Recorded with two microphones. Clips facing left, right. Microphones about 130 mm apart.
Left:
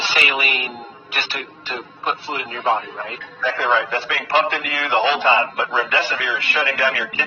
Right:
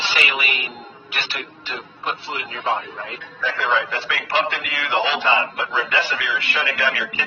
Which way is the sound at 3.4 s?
45° left (ahead or behind).